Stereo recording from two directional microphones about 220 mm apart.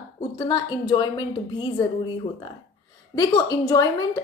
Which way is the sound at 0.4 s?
20° left (ahead or behind).